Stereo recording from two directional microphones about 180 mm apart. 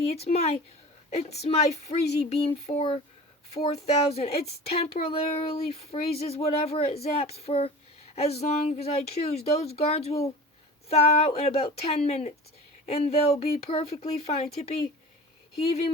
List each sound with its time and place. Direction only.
0.0 s speech: 35° left (ahead or behind)